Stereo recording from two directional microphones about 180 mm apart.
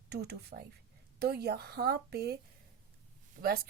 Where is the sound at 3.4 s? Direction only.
55° right (ahead or behind).